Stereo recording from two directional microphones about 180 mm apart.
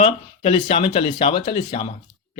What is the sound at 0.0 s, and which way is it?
A man's voice, 30° left (ahead or behind).